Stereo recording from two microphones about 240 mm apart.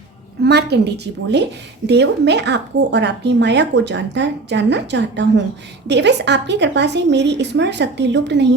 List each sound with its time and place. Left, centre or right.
0.4 s speech: right